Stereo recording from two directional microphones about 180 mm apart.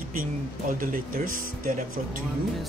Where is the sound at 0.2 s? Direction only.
50° right (ahead or behind).